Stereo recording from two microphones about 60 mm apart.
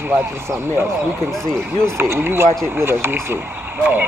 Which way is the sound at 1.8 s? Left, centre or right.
Right.